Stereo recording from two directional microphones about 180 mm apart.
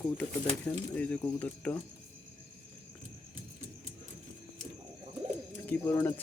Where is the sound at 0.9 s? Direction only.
5° left (ahead or behind).